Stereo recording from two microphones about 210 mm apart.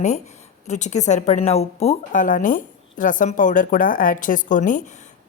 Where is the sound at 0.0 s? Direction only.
35° left (ahead or behind).